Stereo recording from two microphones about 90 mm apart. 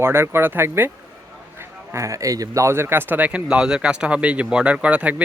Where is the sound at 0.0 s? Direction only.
25° right (ahead or behind).